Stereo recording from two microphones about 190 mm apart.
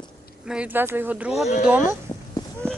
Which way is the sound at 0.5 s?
10° right (ahead or behind).